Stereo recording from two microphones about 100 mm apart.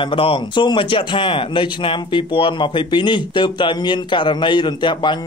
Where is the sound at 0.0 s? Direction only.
60° left (ahead or behind).